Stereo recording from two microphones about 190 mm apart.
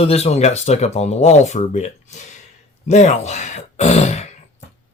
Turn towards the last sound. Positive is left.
turn(degrees=35)  # may be behind; listen again after turning